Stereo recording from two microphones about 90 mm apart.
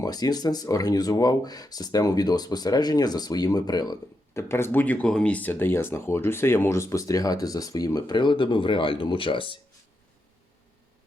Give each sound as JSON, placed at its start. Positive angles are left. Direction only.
{"t": 0.0, "sound": "speech", "side_deg": 45}
{"t": 4.4, "sound": "speech", "side_deg": 25}